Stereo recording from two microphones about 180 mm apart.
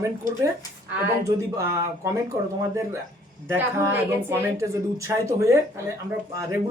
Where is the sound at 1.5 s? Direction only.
15° right (ahead or behind).